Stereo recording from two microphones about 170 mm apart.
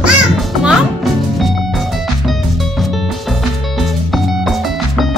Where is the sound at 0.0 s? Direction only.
Centre (ahead or behind).